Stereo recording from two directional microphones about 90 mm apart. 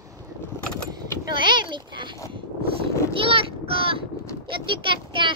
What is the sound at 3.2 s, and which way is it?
Child singing, 90° right.